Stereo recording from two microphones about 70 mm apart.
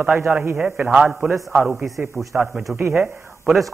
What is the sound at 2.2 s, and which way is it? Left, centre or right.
Speech, right.